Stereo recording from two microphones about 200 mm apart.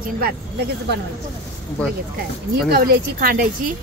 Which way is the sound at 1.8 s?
5° left (ahead or behind).